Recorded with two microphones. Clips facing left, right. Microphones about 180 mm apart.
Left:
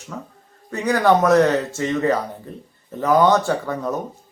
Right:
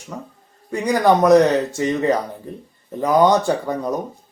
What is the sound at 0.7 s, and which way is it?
Speech, 15° right (ahead or behind).